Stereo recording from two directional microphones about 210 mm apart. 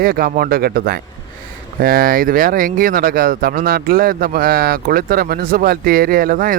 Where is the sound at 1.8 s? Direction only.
45° right (ahead or behind).